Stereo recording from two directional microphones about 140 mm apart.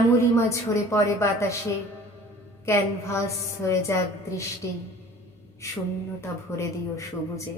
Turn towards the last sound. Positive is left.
turn(degrees=20)  # may be behind; listen again after turning